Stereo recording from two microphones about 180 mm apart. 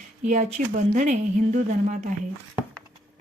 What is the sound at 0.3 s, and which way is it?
A woman's voice, 45° right (ahead or behind).